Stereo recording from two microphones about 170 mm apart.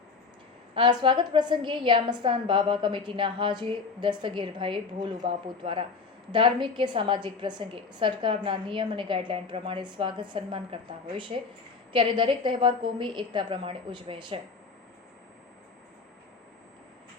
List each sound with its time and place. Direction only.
0.7 s a woman's voice: 30° right (ahead or behind)
11.9 s a woman's voice: 30° right (ahead or behind)